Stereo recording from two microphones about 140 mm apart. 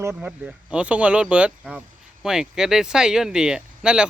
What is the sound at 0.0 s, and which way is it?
Speech, 15° right (ahead or behind).